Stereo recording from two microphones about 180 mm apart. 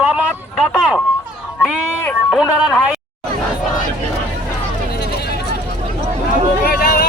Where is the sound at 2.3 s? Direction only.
Centre (ahead or behind).